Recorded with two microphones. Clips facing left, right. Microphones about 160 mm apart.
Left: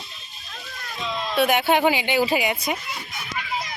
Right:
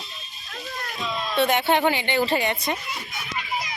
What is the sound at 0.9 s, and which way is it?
Speech, centre (ahead or behind).